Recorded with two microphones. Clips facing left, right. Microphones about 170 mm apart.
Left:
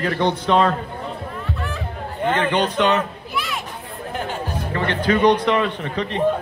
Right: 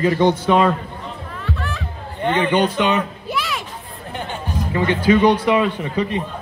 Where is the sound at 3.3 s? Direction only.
90° right.